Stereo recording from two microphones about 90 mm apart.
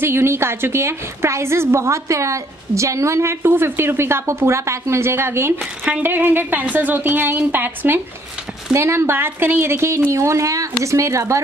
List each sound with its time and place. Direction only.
0.0 s a woman's voice: 25° right (ahead or behind)